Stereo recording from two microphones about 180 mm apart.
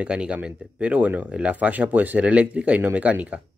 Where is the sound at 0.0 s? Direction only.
5° right (ahead or behind).